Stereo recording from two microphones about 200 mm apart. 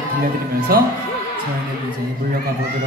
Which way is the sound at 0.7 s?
50° right (ahead or behind).